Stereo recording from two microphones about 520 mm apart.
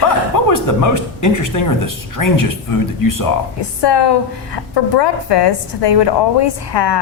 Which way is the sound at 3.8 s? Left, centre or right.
Left.